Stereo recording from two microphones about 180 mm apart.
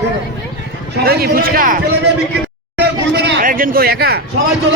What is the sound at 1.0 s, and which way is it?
Speech, 60° right (ahead or behind).